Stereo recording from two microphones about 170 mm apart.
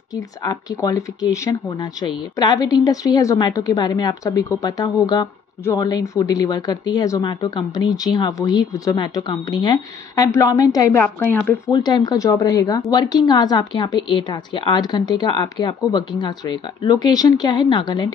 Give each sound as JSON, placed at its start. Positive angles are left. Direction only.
{"t": 0.5, "sound": "a woman's voice", "side_deg": 20}
{"t": 11.7, "sound": "a woman's voice", "side_deg": 25}